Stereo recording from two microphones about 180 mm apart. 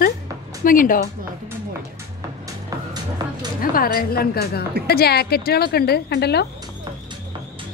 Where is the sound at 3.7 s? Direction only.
55° left (ahead or behind).